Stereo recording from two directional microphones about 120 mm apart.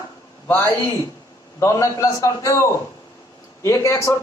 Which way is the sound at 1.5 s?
25° left (ahead or behind).